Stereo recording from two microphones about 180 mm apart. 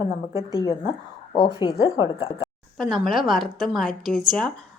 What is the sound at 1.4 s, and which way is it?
Speech, 25° left (ahead or behind).